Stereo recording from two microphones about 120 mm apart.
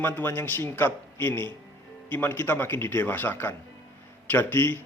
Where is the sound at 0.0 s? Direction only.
20° left (ahead or behind).